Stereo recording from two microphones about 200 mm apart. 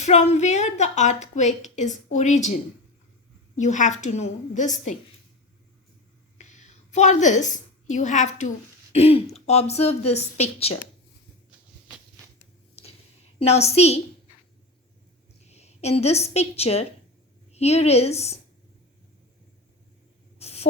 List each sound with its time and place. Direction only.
0.0 s a woman's voice: 35° left (ahead or behind)
6.4 s a woman's voice: 35° left (ahead or behind)
13.4 s a woman's voice: 30° left (ahead or behind)
15.4 s a woman's voice: 30° left (ahead or behind)
20.4 s a sound: 30° left (ahead or behind)